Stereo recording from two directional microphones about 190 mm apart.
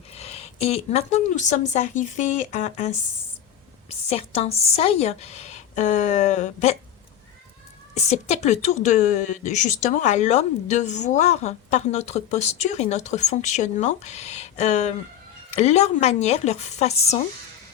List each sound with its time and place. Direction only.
0.1 s a woman's voice: 35° left (ahead or behind)
7.9 s a woman's voice: 35° left (ahead or behind)